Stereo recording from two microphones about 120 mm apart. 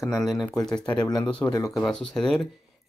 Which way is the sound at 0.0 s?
Centre (ahead or behind).